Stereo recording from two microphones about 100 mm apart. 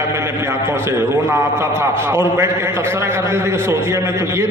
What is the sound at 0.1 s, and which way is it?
A man's voice, 25° right (ahead or behind).